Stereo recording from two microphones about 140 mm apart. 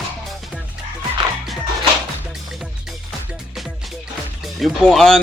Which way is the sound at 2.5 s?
5° right (ahead or behind).